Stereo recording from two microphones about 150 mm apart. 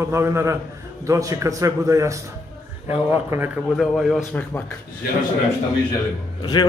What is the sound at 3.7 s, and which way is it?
Speech, 5° right (ahead or behind).